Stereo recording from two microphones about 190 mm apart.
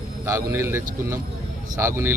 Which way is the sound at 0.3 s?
15° right (ahead or behind).